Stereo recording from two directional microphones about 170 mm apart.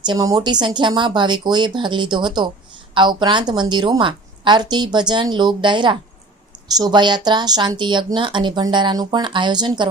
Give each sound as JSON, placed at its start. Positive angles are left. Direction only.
{"t": 0.0, "sound": "speech", "side_deg": -25}